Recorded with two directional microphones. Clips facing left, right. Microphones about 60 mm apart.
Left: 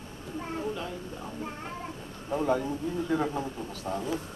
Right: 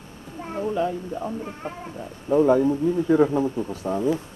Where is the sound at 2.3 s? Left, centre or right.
Right.